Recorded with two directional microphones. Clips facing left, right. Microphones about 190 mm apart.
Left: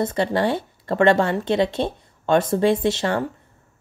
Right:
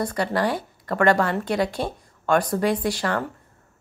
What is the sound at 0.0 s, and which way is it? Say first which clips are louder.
Speech: left 3 dB; 25° left (ahead or behind).